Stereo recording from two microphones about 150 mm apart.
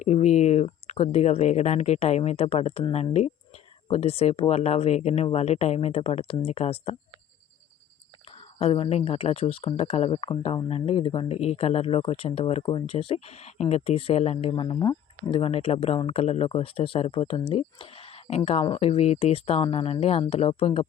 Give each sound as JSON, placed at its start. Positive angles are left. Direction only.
{"t": 0.0, "sound": "speech", "side_deg": 50}
{"t": 8.5, "sound": "speech", "side_deg": 40}